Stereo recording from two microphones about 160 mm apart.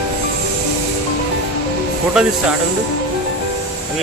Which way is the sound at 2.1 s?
5° right (ahead or behind).